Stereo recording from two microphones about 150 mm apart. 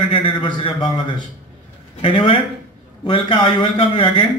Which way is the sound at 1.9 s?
35° left (ahead or behind).